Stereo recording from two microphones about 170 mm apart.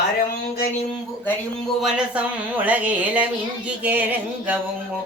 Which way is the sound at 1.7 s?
5° right (ahead or behind).